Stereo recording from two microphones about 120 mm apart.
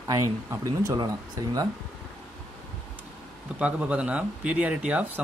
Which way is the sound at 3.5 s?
10° right (ahead or behind).